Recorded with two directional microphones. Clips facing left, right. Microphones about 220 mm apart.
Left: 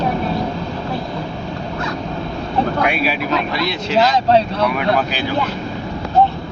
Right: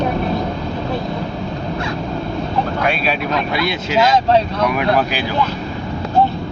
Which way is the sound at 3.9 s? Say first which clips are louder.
Even; 30° left (ahead or behind).